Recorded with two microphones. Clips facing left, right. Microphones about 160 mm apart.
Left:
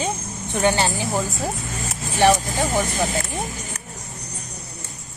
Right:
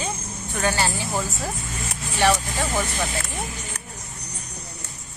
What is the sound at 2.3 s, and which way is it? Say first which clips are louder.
Speech: left 3 dB; 40° left (ahead or behind).